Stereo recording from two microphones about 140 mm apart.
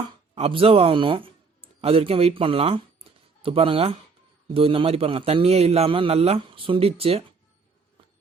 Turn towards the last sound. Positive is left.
turn(degrees=-45)  # may be behind; listen again after turning